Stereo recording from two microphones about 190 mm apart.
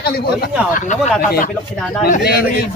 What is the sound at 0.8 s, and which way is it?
Speech, 45° left (ahead or behind).